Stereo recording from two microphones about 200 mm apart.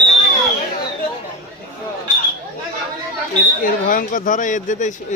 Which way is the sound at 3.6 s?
45° left (ahead or behind).